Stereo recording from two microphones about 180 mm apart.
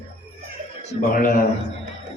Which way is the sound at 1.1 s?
50° left (ahead or behind).